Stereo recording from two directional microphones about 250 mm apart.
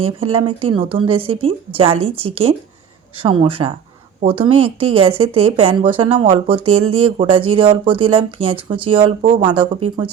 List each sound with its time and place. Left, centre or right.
0.0 s a woman's voice: right